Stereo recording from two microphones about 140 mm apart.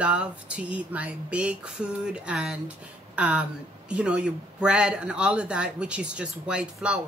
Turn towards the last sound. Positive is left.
turn(degrees=-10)  # may be behind; listen again after turning